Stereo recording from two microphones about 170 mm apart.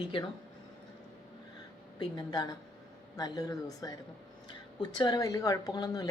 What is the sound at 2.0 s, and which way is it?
Speech, 25° left (ahead or behind).